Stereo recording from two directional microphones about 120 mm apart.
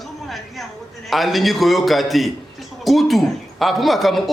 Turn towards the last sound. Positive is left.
turn(degrees=0)  # may be behind; listen again after turning